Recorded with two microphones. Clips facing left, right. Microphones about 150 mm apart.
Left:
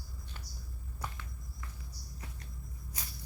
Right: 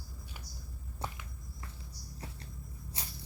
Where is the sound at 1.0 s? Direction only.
25° right (ahead or behind).